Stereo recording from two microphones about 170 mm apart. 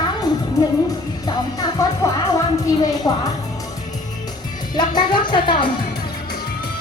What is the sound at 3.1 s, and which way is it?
Speech, 20° left (ahead or behind).